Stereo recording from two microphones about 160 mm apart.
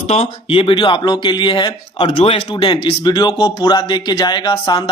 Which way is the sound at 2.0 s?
40° left (ahead or behind).